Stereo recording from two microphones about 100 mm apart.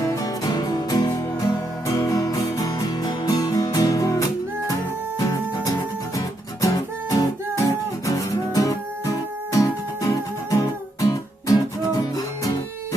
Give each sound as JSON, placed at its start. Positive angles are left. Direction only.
{"t": 0.0, "sound": "music", "side_deg": 35}
{"t": 6.1, "sound": "music", "side_deg": 35}